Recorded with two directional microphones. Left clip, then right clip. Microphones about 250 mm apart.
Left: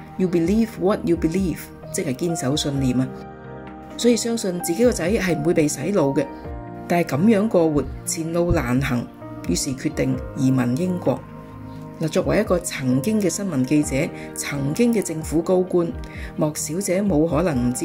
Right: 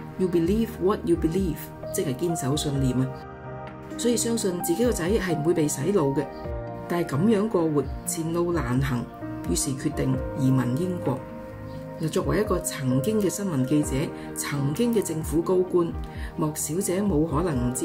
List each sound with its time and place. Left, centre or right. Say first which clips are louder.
0.3 s speech: left 4 dB; centre
4.0 s speech: left 5 dB; centre
12.0 s speech: left 5 dB; centre